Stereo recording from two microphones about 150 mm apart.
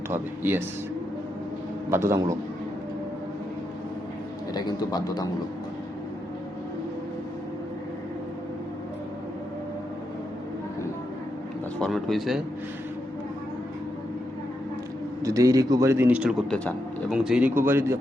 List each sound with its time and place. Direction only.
0.1 s speech: 15° right (ahead or behind)
1.9 s a man's voice: 20° right (ahead or behind)
4.5 s a man's voice: 25° left (ahead or behind)
11.8 s speech: centre (ahead or behind)
15.2 s a man's voice: 20° right (ahead or behind)